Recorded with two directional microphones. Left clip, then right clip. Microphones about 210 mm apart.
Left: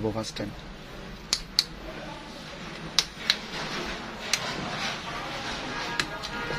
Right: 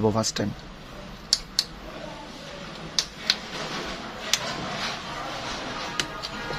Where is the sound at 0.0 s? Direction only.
45° right (ahead or behind).